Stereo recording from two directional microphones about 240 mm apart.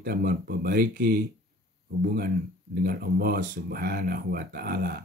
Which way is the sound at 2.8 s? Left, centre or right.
Right.